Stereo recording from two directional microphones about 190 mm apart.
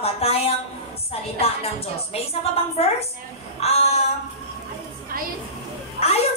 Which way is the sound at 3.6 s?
30° left (ahead or behind).